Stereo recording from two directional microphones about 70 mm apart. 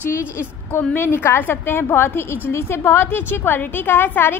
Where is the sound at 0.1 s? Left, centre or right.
Left.